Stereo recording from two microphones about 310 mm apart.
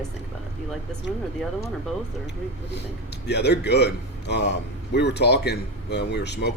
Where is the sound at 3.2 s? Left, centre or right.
Left.